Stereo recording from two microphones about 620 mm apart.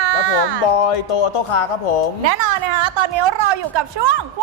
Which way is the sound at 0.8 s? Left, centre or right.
Left.